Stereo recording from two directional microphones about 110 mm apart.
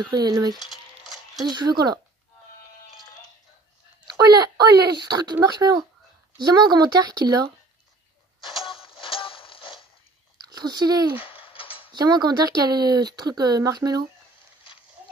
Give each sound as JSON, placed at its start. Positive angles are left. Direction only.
{"t": 0.0, "sound": "speech", "side_deg": -35}
{"t": 0.6, "sound": "a sound", "side_deg": 0}
{"t": 1.4, "sound": "speech", "side_deg": -40}
{"t": 4.3, "sound": "speech", "side_deg": -35}
{"t": 8.6, "sound": "music", "side_deg": 55}
{"t": 10.5, "sound": "speech", "side_deg": -40}
{"t": 11.4, "sound": "mechanisms", "side_deg": 55}
{"t": 11.9, "sound": "speech", "side_deg": -40}